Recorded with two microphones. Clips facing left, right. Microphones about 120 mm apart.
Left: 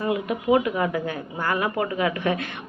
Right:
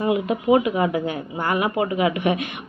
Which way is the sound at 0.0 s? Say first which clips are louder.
Right 4 dB; 20° right (ahead or behind).